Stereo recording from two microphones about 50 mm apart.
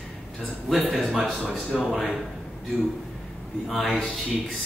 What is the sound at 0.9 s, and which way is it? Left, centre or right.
Speech, centre.